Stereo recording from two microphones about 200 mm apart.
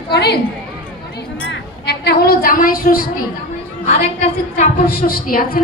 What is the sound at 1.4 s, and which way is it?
Music, 60° left (ahead or behind).